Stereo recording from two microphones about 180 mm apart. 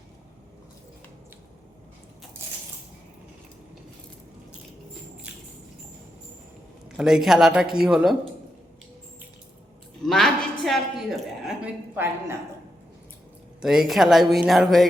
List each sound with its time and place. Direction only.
6.9 s speech: centre (ahead or behind)
10.1 s a sound: centre (ahead or behind)
13.6 s speech: 5° right (ahead or behind)